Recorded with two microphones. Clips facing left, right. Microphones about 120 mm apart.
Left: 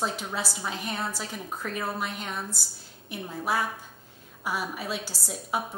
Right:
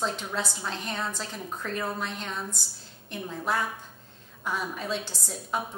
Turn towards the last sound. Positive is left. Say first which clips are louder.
# left 1 dB
turn(degrees=5)  # may be behind; listen again after turning